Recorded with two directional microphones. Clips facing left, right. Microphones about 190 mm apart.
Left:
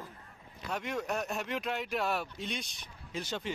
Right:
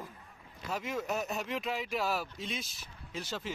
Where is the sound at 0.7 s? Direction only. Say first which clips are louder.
Even; centre (ahead or behind).